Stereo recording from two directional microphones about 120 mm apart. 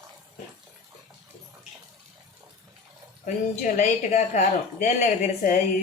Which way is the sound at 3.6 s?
90° left.